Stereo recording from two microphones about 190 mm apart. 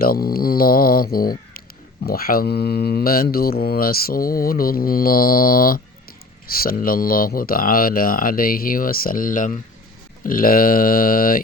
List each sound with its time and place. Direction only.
0.0 s speech: 50° left (ahead or behind)